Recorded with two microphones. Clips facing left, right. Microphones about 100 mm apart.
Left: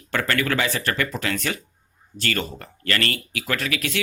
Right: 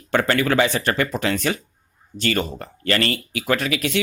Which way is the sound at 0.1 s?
25° right (ahead or behind).